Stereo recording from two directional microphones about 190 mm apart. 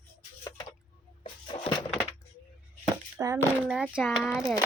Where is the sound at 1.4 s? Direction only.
30° left (ahead or behind).